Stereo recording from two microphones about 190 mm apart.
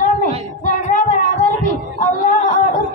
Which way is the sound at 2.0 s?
45° left (ahead or behind).